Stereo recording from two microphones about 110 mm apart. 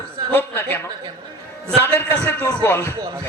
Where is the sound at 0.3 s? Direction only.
20° left (ahead or behind).